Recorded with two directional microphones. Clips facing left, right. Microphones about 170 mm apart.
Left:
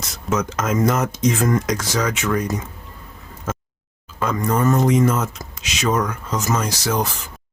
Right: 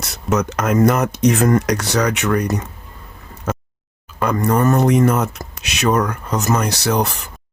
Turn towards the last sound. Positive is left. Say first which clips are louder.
# right 3 dB
turn(degrees=-65)  # may be behind; listen again after turning